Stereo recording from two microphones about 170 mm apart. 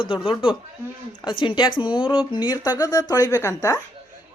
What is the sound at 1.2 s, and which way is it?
A woman's voice, 30° left (ahead or behind).